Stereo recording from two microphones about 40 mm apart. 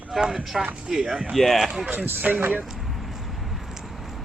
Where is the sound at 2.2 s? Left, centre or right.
Right.